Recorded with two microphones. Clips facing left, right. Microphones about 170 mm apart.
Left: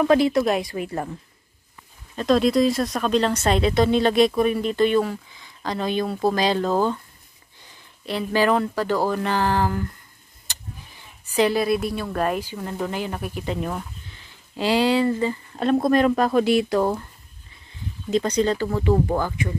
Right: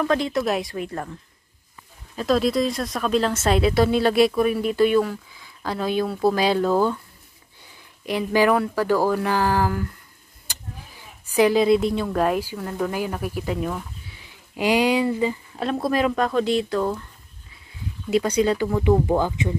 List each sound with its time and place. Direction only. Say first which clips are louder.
0.0 s speech: left 4 dB; 10° left (ahead or behind)
2.1 s speech: left 2 dB; 5° right (ahead or behind)
11.3 s a woman's voice: right 3 dB; 15° right (ahead or behind)
12.1 s speech: right 2 dB; 5° right (ahead or behind)
12.5 s speech: right 2 dB; 5° left (ahead or behind)
13.3 s speech: right 1 dB; 5° right (ahead or behind)
16.3 s speech: left 3 dB; 10° left (ahead or behind)
18.1 s speech: right 1 dB; 10° right (ahead or behind)